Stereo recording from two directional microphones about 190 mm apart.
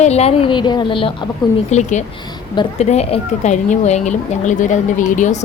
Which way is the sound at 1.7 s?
40° left (ahead or behind).